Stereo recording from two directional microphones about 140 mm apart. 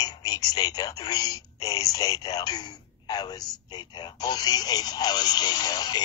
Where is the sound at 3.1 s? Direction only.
30° left (ahead or behind).